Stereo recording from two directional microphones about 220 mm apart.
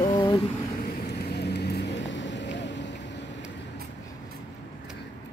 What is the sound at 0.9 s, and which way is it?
Vehicle, 45° left (ahead or behind).